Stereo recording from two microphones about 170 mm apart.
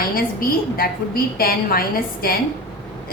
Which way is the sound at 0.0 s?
60° left (ahead or behind).